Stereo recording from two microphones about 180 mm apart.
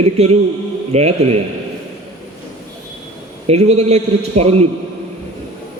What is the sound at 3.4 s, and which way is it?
A man's voice, 35° right (ahead or behind).